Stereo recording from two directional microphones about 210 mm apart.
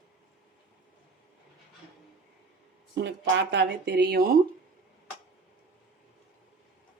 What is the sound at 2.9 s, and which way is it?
Speech, 55° right (ahead or behind).